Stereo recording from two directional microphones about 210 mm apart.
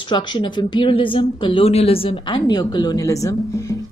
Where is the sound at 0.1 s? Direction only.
25° left (ahead or behind).